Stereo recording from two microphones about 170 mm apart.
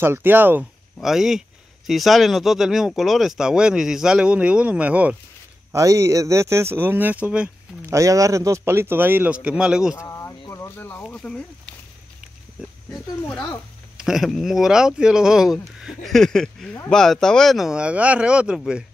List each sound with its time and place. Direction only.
0.0 s speech: 10° right (ahead or behind)
9.9 s speech: 15° left (ahead or behind)
12.9 s speech: 5° left (ahead or behind)